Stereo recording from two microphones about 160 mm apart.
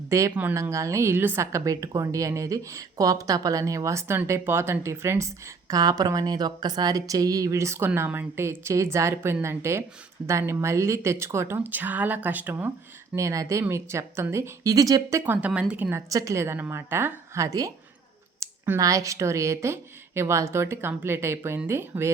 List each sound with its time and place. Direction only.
0.1 s a woman's voice: 20° right (ahead or behind)
15.3 s speech: 10° right (ahead or behind)